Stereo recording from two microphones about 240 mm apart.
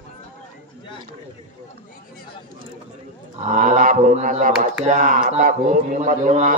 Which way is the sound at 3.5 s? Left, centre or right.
Right.